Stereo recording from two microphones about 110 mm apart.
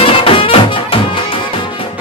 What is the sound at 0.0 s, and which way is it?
Music, 55° left (ahead or behind).